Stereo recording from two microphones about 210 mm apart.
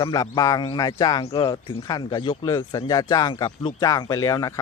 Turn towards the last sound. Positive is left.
turn(degrees=15)  # may be behind; listen again after turning